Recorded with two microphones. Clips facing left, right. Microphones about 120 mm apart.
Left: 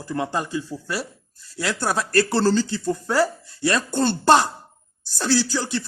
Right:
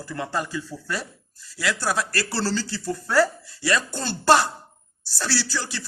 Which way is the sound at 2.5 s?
20° left (ahead or behind).